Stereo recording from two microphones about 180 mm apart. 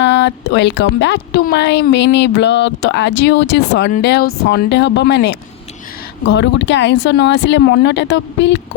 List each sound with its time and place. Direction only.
0.0 s a woman's voice: 80° left